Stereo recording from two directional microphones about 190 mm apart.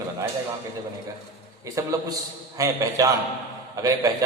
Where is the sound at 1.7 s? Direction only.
15° right (ahead or behind).